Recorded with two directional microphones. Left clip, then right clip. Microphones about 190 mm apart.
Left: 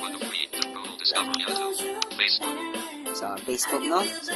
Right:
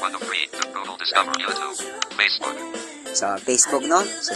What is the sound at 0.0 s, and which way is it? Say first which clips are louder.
Music: right 6 dB; 45° right (ahead or behind).